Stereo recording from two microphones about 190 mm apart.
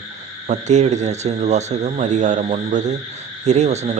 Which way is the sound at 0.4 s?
40° right (ahead or behind).